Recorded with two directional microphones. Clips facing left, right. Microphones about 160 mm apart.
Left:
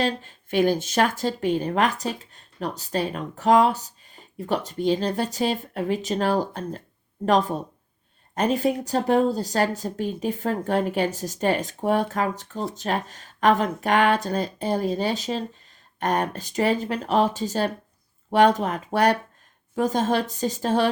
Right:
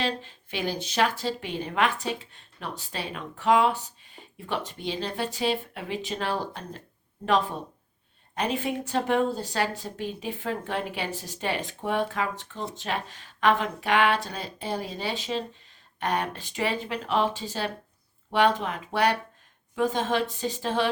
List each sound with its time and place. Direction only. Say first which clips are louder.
0.0 s speech: left 4 dB; 45° left (ahead or behind)